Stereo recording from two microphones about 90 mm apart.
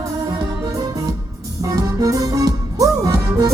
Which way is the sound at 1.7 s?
40° right (ahead or behind).